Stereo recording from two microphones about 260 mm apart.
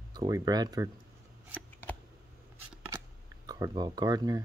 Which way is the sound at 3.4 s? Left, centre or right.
Centre.